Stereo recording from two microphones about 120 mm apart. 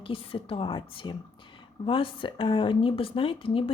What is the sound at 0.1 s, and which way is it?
A woman's voice, 50° left (ahead or behind).